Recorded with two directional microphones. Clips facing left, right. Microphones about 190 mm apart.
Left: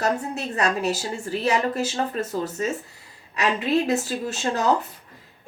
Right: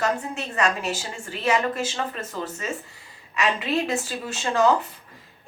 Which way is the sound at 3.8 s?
40° left (ahead or behind).